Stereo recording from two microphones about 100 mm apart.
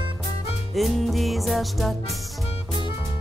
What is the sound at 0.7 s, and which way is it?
Music, centre (ahead or behind).